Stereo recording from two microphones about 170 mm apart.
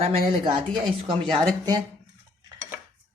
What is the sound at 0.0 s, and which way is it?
Speech, 30° right (ahead or behind).